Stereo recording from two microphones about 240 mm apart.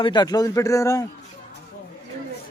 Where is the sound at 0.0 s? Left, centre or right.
Centre.